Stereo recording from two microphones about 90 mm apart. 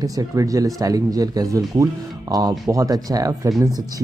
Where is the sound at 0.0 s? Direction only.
40° right (ahead or behind).